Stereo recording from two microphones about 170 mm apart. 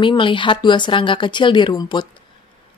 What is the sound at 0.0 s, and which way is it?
Speech, 30° left (ahead or behind).